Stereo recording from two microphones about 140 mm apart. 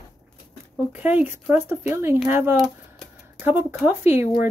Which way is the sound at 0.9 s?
10° right (ahead or behind).